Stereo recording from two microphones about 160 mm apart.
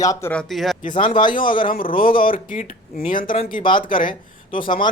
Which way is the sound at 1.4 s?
30° left (ahead or behind).